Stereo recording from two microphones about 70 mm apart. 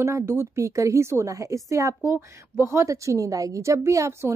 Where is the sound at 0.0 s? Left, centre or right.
Right.